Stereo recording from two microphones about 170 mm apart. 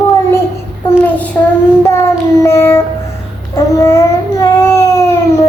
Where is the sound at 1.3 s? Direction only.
15° left (ahead or behind).